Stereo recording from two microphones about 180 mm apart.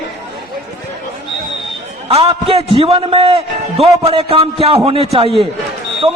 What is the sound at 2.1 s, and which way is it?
A man's voice, 35° right (ahead or behind).